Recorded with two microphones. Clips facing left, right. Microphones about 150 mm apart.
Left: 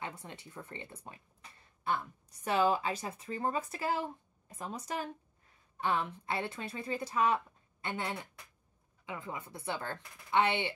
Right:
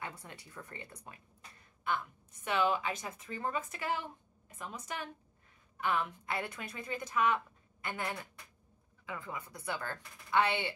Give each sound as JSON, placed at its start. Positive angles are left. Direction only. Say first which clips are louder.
{"t": 0.0, "sound": "a woman's voice", "louder": "left 2 dB", "side_deg": 25}
{"t": 2.4, "sound": "a woman's voice", "louder": "left 2 dB", "side_deg": 35}